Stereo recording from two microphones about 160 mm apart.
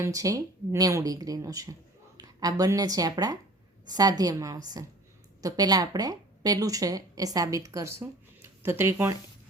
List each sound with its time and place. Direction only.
0.0 s speech: 20° right (ahead or behind)